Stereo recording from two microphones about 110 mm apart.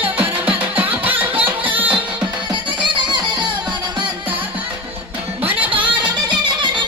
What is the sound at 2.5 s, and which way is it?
Music, 45° right (ahead or behind).